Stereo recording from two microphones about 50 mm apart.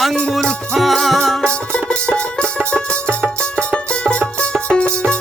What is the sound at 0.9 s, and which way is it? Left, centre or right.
Music, centre.